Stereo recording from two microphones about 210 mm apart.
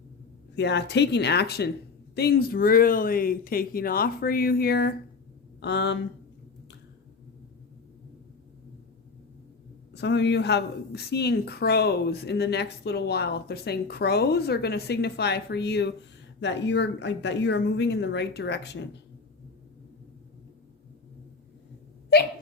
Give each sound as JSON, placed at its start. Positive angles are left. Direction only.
{"t": 0.5, "sound": "speech", "side_deg": 55}
{"t": 9.9, "sound": "speech", "side_deg": 55}